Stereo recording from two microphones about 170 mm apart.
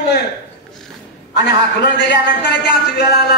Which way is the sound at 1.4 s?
75° left (ahead or behind).